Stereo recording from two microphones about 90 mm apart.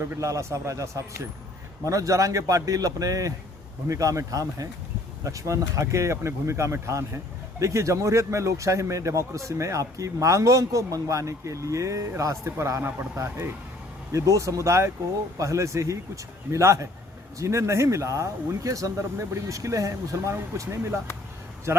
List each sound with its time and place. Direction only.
0.0 s a man's voice: 35° right (ahead or behind)